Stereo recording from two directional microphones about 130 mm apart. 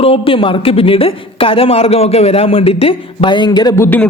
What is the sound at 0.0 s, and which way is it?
Speech, 45° left (ahead or behind).